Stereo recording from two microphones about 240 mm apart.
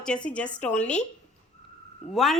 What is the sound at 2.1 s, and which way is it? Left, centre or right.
Speech, centre.